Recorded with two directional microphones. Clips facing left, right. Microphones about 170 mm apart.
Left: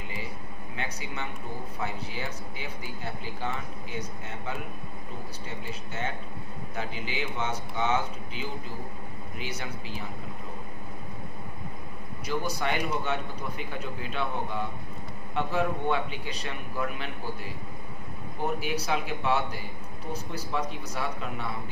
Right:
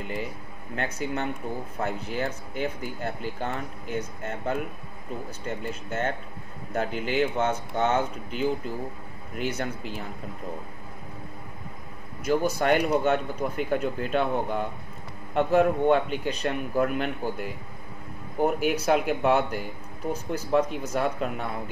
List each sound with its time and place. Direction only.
0.7 s a man's voice: 50° right (ahead or behind)
5.9 s a man's voice: 50° right (ahead or behind)
12.3 s a man's voice: 50° right (ahead or behind)